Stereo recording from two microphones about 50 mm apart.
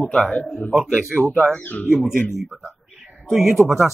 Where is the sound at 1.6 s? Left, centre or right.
Left.